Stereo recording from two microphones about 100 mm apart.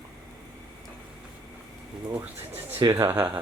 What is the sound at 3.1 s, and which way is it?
Speech, 20° right (ahead or behind).